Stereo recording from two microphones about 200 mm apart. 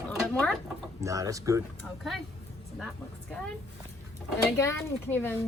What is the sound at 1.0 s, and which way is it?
Speech, 15° right (ahead or behind).